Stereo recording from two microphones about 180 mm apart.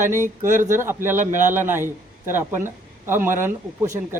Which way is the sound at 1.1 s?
45° right (ahead or behind).